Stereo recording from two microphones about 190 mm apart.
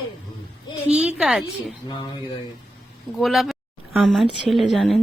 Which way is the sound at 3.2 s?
Centre (ahead or behind).